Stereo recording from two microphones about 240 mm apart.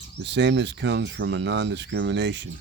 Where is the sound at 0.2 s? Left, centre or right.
Right.